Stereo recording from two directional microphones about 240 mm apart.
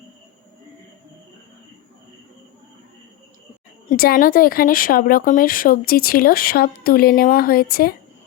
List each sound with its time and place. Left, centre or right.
3.8 s speech: left